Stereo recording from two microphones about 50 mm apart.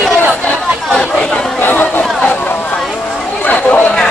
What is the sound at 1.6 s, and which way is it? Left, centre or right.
Chatter, left.